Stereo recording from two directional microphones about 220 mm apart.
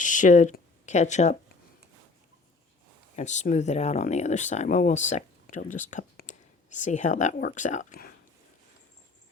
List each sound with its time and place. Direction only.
0.0 s speech: 35° left (ahead or behind)
3.2 s speech: 35° left (ahead or behind)